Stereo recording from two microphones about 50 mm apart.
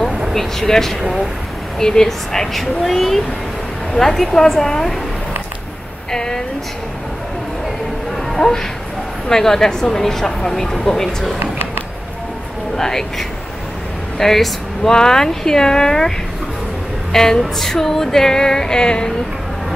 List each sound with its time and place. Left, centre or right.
0.3 s speech: centre
6.1 s speech: centre
8.4 s speech: centre
12.7 s speech: centre
14.1 s speech: centre
17.1 s speech: centre